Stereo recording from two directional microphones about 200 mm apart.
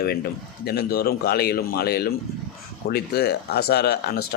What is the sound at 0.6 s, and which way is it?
Speech, 50° left (ahead or behind).